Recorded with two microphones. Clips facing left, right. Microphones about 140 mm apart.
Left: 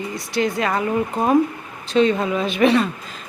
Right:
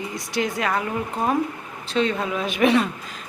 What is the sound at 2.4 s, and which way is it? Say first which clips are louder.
Speech: left 2 dB; 15° right (ahead or behind).